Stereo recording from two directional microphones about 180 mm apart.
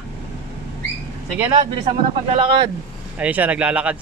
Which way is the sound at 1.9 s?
30° right (ahead or behind).